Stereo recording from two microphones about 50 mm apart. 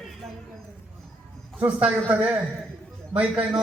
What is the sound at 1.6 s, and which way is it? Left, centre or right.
Speech, right.